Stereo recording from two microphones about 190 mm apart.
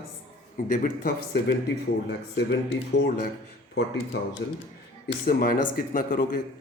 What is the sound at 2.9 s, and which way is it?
Speech, 65° left (ahead or behind).